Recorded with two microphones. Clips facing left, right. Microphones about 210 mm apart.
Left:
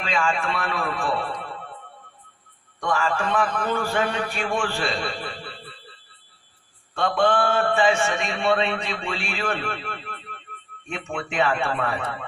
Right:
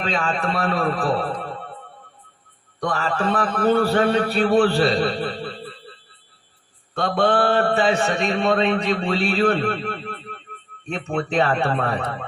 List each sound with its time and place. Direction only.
0.0 s a man's voice: 35° right (ahead or behind)
2.8 s a man's voice: 35° right (ahead or behind)
7.2 s a man's voice: 35° right (ahead or behind)